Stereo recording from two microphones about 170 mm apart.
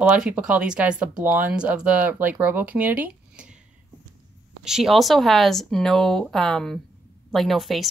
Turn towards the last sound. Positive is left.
turn(degrees=0)  # may be behind; listen again after turning